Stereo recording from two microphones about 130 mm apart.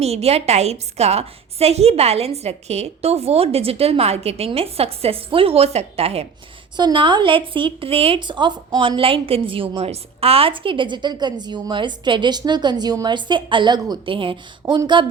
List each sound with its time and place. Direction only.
0.0 s a woman's voice: 55° right (ahead or behind)
6.7 s speech: 35° right (ahead or behind)